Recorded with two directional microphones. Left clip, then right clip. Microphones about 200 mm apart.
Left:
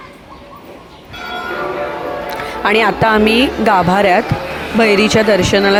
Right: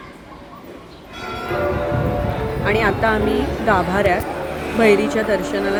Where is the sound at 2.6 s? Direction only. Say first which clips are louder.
Left 6 dB; 55° left (ahead or behind).